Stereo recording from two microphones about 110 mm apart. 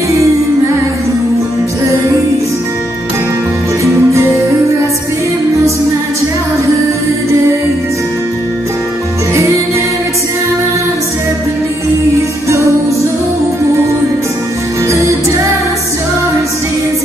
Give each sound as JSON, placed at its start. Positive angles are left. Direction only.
{"t": 3.8, "sound": "music", "side_deg": -30}